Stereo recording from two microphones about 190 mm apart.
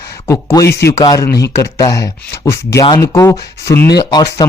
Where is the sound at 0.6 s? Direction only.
60° left (ahead or behind).